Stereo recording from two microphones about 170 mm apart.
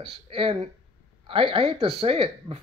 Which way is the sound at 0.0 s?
35° right (ahead or behind).